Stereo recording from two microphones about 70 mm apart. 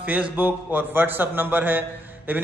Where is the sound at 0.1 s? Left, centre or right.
Right.